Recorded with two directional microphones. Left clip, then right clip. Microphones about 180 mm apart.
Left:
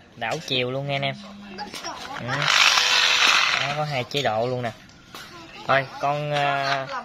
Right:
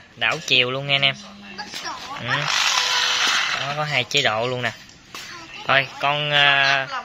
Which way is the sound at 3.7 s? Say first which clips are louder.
Right 5 dB; 5° left (ahead or behind).